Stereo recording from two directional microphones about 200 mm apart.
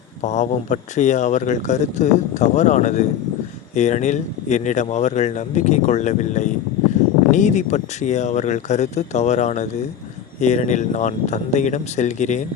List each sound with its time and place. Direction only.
0.2 s speech: 35° left (ahead or behind)